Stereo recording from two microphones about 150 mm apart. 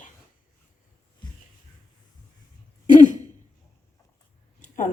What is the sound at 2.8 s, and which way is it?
Throat clearing, 55° left (ahead or behind).